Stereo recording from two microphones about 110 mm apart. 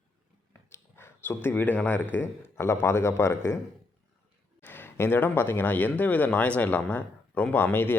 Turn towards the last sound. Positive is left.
turn(degrees=20)  # may be behind; listen again after turning